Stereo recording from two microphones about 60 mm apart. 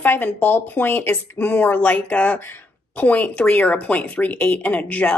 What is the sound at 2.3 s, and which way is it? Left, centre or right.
A woman's voice, left.